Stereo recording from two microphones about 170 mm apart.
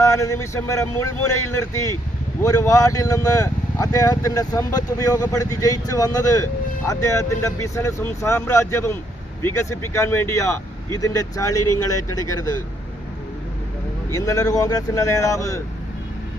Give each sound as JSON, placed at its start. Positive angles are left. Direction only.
{"t": 0.0, "sound": "a man's voice", "side_deg": 20}
{"t": 14.1, "sound": "speech", "side_deg": 20}